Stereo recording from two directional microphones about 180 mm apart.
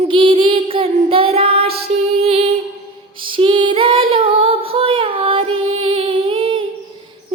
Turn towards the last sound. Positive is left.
turn(degrees=-30)  # may be behind; listen again after turning